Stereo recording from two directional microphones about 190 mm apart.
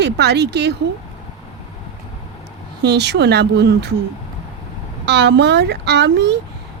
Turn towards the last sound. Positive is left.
turn(degrees=-65)  # may be behind; listen again after turning